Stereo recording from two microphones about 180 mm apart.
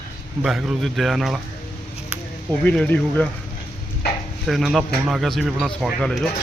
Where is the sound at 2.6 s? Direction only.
5° left (ahead or behind).